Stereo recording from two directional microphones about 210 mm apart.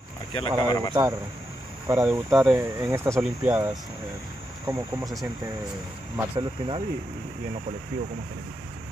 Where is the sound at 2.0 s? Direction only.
Centre (ahead or behind).